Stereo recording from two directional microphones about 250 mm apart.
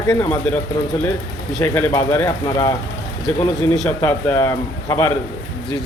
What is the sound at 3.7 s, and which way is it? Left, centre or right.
Speech, centre.